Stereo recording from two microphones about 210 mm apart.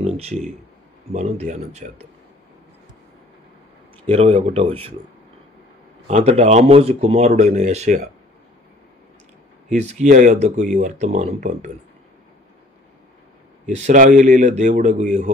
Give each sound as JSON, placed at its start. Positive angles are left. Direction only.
{"t": 0.0, "sound": "speech", "side_deg": -30}
{"t": 4.0, "sound": "speech", "side_deg": -30}
{"t": 6.0, "sound": "speech", "side_deg": -30}
{"t": 9.7, "sound": "speech", "side_deg": -35}
{"t": 13.7, "sound": "speech", "side_deg": -35}